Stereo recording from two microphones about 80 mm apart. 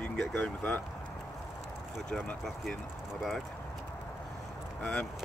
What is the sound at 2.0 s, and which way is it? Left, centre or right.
Speech, centre.